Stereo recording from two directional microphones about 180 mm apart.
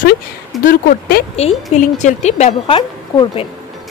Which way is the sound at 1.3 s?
40° left (ahead or behind).